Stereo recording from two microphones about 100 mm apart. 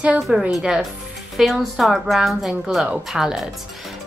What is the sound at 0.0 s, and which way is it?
A woman's voice, 10° right (ahead or behind).